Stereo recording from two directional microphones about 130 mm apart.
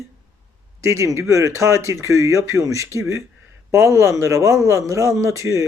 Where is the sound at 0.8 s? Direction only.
20° right (ahead or behind).